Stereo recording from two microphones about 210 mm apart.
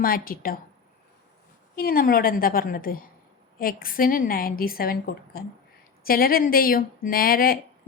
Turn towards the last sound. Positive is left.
turn(degrees=45)  # may be behind; listen again after turning